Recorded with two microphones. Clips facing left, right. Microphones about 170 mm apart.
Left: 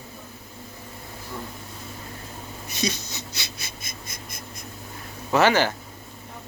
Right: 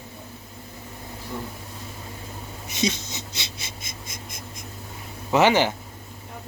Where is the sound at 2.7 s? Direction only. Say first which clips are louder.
Right 3 dB; 20° right (ahead or behind).